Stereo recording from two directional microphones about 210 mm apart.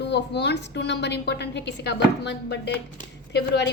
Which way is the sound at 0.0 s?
55° left (ahead or behind).